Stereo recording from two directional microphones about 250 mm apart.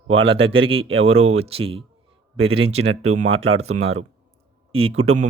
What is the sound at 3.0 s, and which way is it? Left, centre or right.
Speech, right.